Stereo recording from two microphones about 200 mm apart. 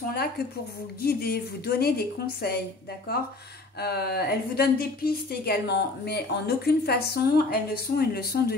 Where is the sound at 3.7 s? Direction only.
50° left (ahead or behind).